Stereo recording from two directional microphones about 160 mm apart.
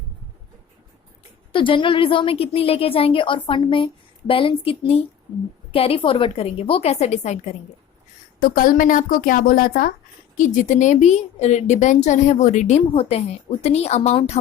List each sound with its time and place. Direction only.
1.5 s a woman's voice: 30° left (ahead or behind)
8.4 s speech: 60° left (ahead or behind)
10.3 s a woman's voice: 55° left (ahead or behind)